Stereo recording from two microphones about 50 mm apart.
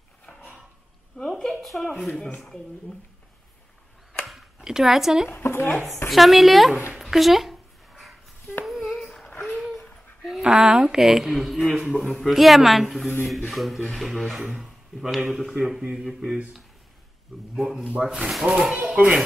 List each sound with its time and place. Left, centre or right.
0.4 s a sound: right
1.4 s speech: centre
4.3 s a sound: centre
5.3 s speech: left
6.0 s speech: centre
7.0 s a sound: centre
10.4 s a woman's voice: centre
11.7 s a woman's voice: centre
12.0 s speech: centre
14.5 s a sound: centre
15.6 s a woman's voice: centre
17.6 s a woman's voice: centre
18.8 s speech: right